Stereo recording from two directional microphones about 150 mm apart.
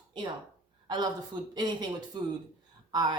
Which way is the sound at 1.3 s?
30° right (ahead or behind).